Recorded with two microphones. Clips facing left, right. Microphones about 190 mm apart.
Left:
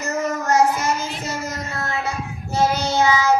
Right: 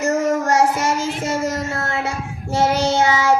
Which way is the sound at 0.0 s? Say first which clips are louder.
Right 6 dB; 90° right.